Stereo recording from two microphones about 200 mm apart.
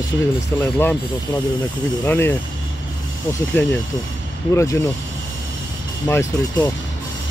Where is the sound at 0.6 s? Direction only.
10° left (ahead or behind).